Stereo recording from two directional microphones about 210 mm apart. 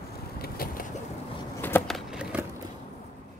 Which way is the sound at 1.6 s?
10° left (ahead or behind).